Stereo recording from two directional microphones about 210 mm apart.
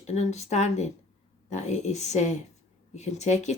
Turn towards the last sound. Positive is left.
turn(degrees=35)  # may be behind; listen again after turning